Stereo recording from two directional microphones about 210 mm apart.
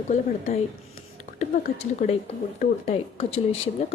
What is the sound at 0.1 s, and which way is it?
A woman's voice, 35° left (ahead or behind).